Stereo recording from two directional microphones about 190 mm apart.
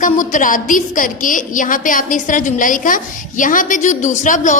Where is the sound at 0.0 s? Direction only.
45° left (ahead or behind).